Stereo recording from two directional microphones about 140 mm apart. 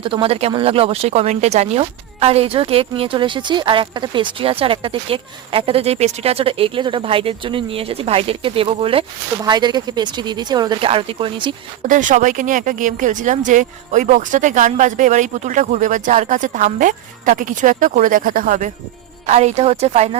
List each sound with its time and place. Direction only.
0.0 s speech: 40° right (ahead or behind)
9.4 s speech: 30° right (ahead or behind)
11.8 s speech: 65° right (ahead or behind)
19.2 s speech: 50° right (ahead or behind)